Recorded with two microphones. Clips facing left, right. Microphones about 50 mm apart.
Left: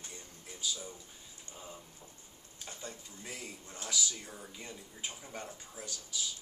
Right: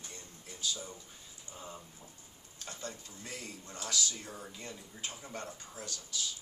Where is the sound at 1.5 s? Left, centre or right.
Left.